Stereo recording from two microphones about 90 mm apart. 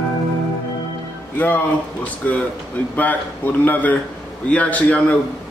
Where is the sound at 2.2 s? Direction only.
20° left (ahead or behind).